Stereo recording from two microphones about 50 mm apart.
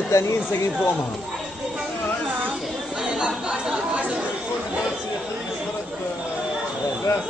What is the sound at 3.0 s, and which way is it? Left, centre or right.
Chatter, centre.